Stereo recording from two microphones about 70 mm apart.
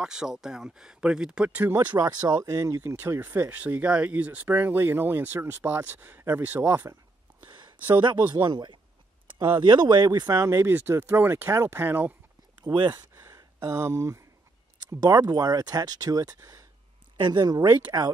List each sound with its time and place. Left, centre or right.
0.0 s speech: centre
1.6 s speech: right
2.4 s speech: right
3.2 s speech: right
8.3 s speech: right
10.3 s speech: right
10.7 s speech: right
11.5 s speech: right
11.8 s speech: right
12.7 s speech: right
15.0 s speech: right
17.3 s speech: right